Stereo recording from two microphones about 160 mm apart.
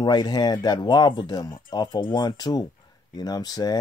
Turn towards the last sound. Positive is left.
turn(degrees=25)  # may be behind; listen again after turning